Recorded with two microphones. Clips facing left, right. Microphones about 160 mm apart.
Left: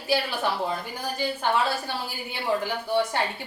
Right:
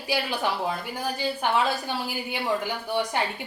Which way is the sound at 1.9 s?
15° right (ahead or behind).